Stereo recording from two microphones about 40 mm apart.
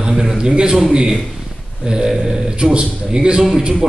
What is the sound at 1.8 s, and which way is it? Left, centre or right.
A man's voice, centre.